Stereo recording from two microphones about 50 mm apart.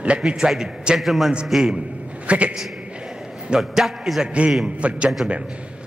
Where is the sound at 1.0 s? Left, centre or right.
Centre.